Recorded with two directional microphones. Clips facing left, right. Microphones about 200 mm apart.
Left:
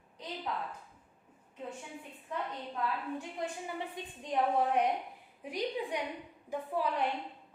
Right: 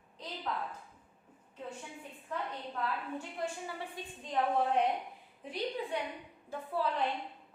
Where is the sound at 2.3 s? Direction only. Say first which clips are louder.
Left 1 dB; 15° left (ahead or behind).